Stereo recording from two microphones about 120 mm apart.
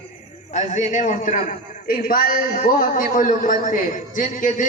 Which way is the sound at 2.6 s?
90° left.